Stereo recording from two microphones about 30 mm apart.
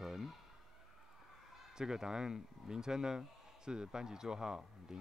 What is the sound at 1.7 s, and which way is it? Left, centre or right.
Speech, right.